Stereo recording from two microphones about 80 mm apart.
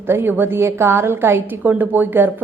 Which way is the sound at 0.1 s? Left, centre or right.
Right.